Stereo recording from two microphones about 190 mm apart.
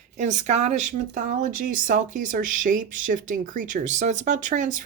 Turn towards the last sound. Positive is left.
turn(degrees=-40)  # may be behind; listen again after turning